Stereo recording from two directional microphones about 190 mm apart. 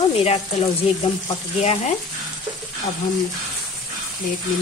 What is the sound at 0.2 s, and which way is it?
Speech, 30° left (ahead or behind).